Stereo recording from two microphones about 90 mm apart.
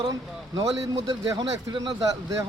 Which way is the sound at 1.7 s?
60° right (ahead or behind).